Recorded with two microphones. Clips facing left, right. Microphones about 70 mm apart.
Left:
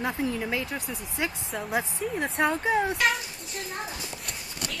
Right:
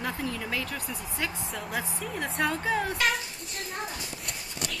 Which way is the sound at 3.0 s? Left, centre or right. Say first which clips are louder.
Left 2 dB; centre.